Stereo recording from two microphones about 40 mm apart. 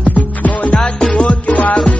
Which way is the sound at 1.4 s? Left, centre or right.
Left.